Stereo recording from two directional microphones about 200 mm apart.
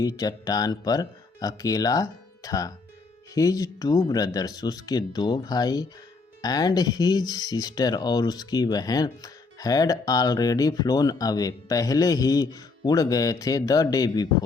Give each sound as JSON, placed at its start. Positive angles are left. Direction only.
{"t": 0.0, "sound": "speech", "side_deg": 20}